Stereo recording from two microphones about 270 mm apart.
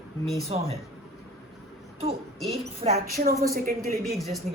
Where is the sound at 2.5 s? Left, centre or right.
Right.